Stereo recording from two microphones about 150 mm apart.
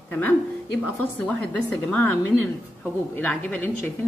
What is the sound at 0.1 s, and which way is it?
A woman's voice, 15° left (ahead or behind).